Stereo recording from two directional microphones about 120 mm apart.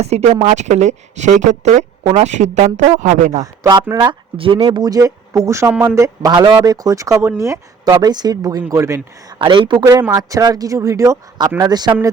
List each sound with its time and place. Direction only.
0.0 s speech: 65° right (ahead or behind); by 1.8 s 80° right
2.0 s speech: 65° right (ahead or behind); by 3.4 s 90° right
3.4 s a man's voice: 25° right (ahead or behind)
3.9 s a man's voice: 40° right (ahead or behind); by 6.3 s 25° right (ahead or behind)
6.3 s a man's voice: 40° right (ahead or behind); by 9.0 s 25° right (ahead or behind)
9.4 s speech: 45° right (ahead or behind)
9.8 s a man's voice: 20° right (ahead or behind)